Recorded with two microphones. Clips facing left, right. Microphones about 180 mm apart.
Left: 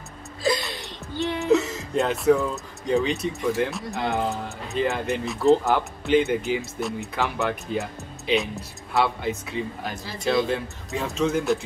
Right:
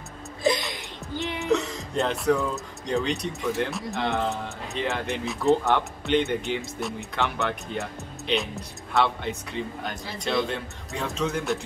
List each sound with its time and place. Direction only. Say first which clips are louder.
0.4 s whimper: even; 20° right (ahead or behind)
1.5 s speech: left 4 dB; centre (ahead or behind)